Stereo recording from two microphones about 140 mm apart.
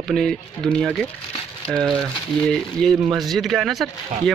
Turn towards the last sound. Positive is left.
turn(degrees=0)  # may be behind; listen again after turning